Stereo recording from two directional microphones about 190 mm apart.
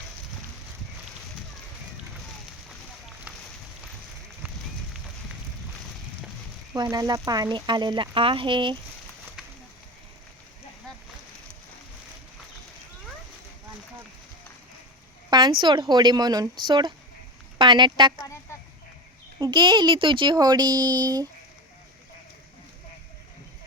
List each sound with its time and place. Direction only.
6.7 s speech: 20° right (ahead or behind)
15.3 s a sound: 20° right (ahead or behind)
15.6 s speech: 25° right (ahead or behind)
19.4 s speech: 25° right (ahead or behind)